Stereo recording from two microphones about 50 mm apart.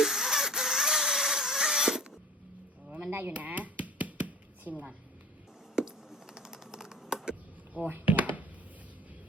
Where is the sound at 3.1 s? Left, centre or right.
Right.